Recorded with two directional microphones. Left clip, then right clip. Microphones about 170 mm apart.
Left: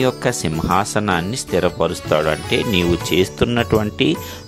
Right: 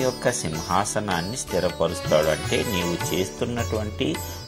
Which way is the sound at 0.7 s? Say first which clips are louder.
Left 6 dB; 40° left (ahead or behind).